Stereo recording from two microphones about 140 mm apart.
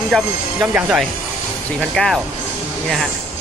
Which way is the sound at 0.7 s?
5° right (ahead or behind).